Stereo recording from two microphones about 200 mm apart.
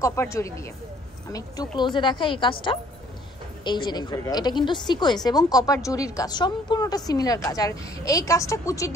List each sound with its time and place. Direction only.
0.0 s a woman's voice: 15° left (ahead or behind)